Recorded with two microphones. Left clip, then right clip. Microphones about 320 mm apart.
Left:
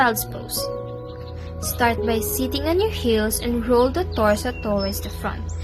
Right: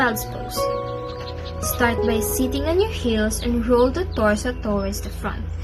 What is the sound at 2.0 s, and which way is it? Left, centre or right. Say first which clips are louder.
Speech: right 1 dB; left.